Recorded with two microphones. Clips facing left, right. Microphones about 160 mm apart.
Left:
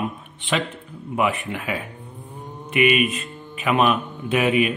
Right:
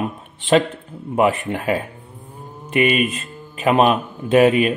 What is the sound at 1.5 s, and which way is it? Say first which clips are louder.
Speech: right 6 dB; 40° right (ahead or behind).